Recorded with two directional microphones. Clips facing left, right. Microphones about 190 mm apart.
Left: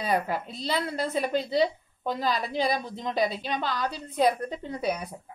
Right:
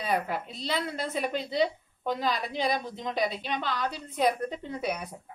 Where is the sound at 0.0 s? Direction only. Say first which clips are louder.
Left 2 dB; 35° left (ahead or behind).